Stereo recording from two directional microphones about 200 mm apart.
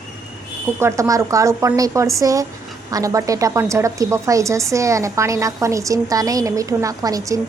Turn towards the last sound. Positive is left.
turn(degrees=-15)  # may be behind; listen again after turning